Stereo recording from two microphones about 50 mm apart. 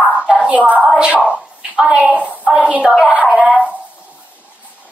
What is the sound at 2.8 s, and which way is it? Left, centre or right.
Speech, centre.